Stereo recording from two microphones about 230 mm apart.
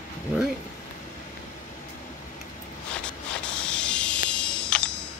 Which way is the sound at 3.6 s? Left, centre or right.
Centre.